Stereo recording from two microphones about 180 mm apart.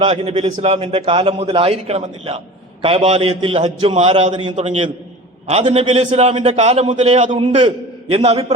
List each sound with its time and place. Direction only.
0.0 s a man's voice: 35° right (ahead or behind)